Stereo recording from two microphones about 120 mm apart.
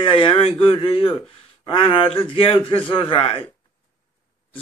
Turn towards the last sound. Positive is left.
turn(degrees=50)  # may be behind; listen again after turning